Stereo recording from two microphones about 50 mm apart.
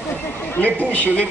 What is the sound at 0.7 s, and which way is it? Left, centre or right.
Speech, left.